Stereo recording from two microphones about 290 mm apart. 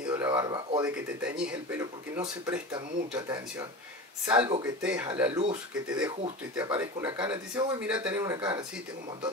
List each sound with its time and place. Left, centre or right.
0.0 s a sound: centre
1.2 s speech: centre
4.8 s speech: centre
6.6 s speech: centre